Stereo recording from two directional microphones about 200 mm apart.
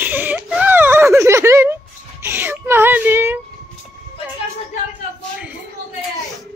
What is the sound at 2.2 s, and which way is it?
Whimper, 10° right (ahead or behind).